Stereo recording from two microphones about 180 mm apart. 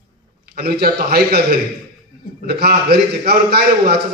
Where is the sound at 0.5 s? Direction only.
60° right (ahead or behind).